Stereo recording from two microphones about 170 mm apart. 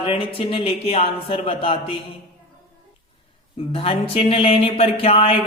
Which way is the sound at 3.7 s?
35° left (ahead or behind).